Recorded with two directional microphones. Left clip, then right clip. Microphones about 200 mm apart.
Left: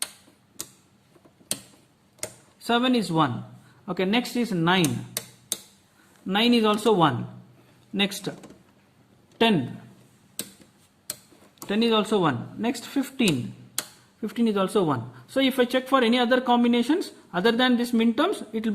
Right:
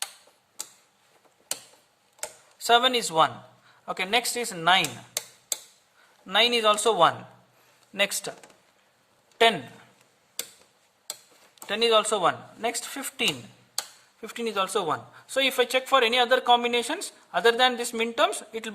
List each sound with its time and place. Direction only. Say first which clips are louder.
2.6 s speech: right 3 dB; 40° right (ahead or behind)
6.2 s speech: right 1 dB; 30° right (ahead or behind)
11.6 s speech: right 2 dB; 35° right (ahead or behind)